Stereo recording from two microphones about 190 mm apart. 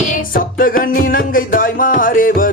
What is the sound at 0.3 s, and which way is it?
Music, 45° left (ahead or behind).